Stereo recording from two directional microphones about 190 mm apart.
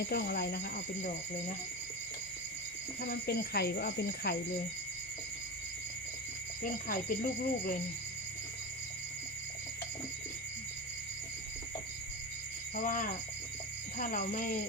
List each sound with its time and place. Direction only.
0.1 s speech: 55° left (ahead or behind)
3.1 s speech: 55° left (ahead or behind)
6.6 s speech: 45° left (ahead or behind)
12.7 s speech: 45° left (ahead or behind)